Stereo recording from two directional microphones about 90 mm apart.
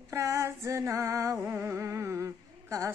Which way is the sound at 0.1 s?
30° right (ahead or behind).